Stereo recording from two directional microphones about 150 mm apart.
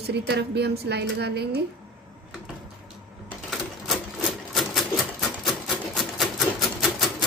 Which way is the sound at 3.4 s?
Centre (ahead or behind).